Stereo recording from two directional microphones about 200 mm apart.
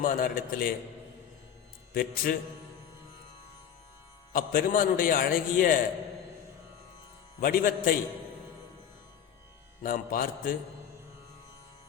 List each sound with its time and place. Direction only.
0.0 s speech: 45° left (ahead or behind)
1.9 s a man's voice: 50° left (ahead or behind)
4.3 s speech: 45° left (ahead or behind)
7.4 s speech: 45° left (ahead or behind)
9.8 s speech: 45° left (ahead or behind)